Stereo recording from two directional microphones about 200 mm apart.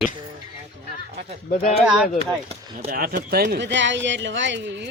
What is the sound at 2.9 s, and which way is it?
Speech, 45° right (ahead or behind).